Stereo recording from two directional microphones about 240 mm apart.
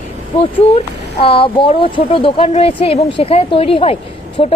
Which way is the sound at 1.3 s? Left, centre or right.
Left.